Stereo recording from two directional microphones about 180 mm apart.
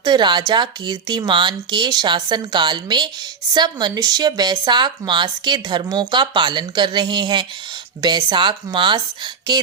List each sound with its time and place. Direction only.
0.0 s a woman's voice: 25° right (ahead or behind)